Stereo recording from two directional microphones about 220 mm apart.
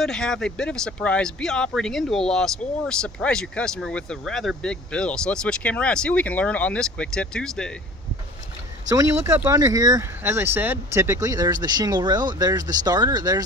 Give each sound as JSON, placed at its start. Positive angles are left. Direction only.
{"t": 0.0, "sound": "speech", "side_deg": 5}
{"t": 8.9, "sound": "speech", "side_deg": -15}